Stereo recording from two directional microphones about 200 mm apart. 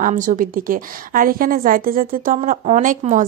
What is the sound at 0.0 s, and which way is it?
A woman's voice, 45° right (ahead or behind).